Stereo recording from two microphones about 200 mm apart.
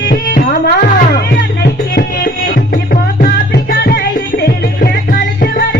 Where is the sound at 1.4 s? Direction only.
50° left (ahead or behind).